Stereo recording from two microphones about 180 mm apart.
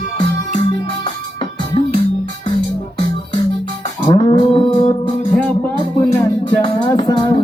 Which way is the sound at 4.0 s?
25° left (ahead or behind).